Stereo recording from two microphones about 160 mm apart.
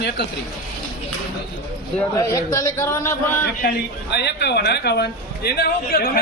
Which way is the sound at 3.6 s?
90° left.